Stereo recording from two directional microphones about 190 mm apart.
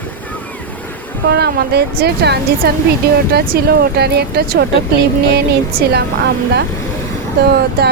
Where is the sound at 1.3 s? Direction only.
60° right (ahead or behind).